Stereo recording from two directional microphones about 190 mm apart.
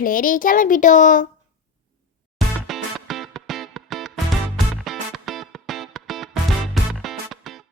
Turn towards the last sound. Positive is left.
turn(degrees=0)  # may be behind; listen again after turning